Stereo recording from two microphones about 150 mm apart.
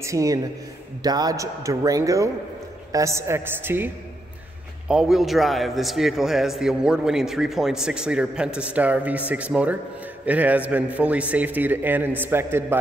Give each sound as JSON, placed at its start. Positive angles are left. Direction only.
{"t": 0.0, "sound": "a man's voice", "side_deg": -20}